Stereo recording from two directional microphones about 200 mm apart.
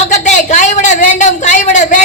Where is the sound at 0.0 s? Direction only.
35° left (ahead or behind).